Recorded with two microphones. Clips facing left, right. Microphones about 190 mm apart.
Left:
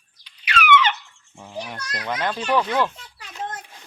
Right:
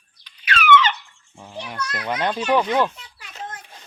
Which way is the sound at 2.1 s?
15° right (ahead or behind).